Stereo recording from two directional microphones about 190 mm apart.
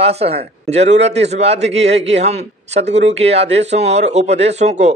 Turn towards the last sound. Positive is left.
turn(degrees=-35)  # may be behind; listen again after turning